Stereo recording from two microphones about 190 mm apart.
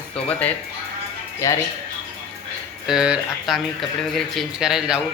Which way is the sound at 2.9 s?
5° right (ahead or behind).